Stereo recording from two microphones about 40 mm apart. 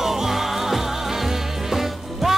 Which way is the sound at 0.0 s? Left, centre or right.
Centre.